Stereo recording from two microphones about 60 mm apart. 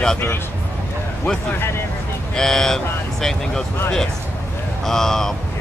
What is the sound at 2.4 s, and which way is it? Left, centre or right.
Speech, centre.